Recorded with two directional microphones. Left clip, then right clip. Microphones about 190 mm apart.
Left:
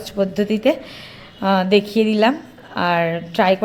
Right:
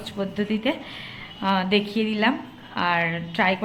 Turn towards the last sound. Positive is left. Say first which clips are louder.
# left 6 dB
turn(degrees=35)  # may be behind; listen again after turning